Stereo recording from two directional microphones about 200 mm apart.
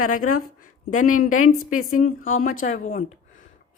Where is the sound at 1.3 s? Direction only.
90° left.